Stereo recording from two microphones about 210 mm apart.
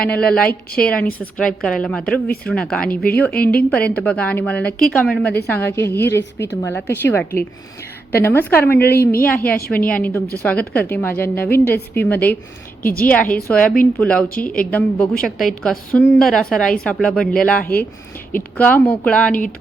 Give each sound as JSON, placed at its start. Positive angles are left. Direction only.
{"t": 0.0, "sound": "a woman's voice", "side_deg": 5}
{"t": 12.8, "sound": "a woman's voice", "side_deg": 45}
{"t": 13.3, "sound": "a woman's voice", "side_deg": 5}